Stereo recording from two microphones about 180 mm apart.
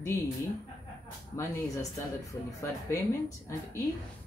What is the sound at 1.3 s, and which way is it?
Speech, 20° left (ahead or behind).